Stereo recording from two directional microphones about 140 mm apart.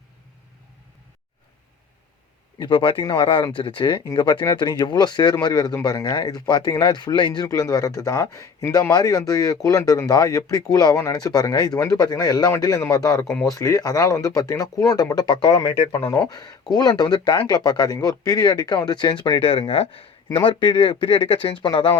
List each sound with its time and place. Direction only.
2.6 s speech: 35° left (ahead or behind)
16.0 s speech: 15° left (ahead or behind)
16.3 s speech: 30° left (ahead or behind)
19.4 s speech: 40° left (ahead or behind)